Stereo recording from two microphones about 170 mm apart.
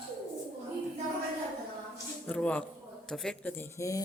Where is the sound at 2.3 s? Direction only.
5° left (ahead or behind).